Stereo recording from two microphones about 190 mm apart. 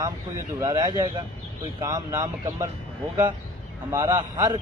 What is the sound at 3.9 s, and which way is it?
Speech, 20° right (ahead or behind).